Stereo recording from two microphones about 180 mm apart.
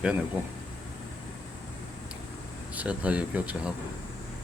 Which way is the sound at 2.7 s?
5° right (ahead or behind).